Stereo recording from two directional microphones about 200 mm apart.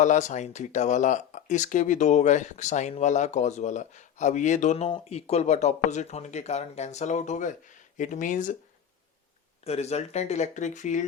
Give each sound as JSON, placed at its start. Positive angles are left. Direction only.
{"t": 0.0, "sound": "speech", "side_deg": 40}
{"t": 9.6, "sound": "speech", "side_deg": 30}